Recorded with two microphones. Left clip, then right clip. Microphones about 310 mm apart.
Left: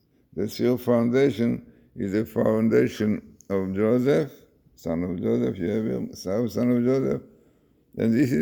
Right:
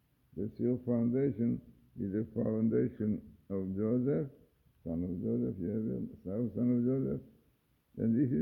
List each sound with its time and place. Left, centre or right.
0.6 s speech: left